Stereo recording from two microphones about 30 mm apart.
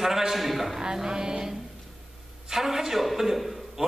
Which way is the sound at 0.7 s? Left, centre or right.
Centre.